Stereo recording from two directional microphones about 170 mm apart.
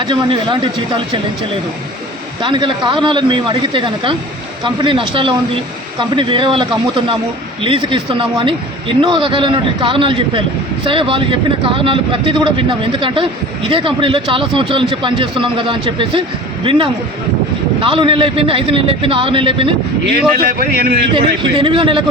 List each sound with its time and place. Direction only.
0.0 s a man's voice: 25° right (ahead or behind)
2.4 s a man's voice: 30° right (ahead or behind)
20.5 s a man's voice: 60° right (ahead or behind)
21.1 s a man's voice: 30° right (ahead or behind)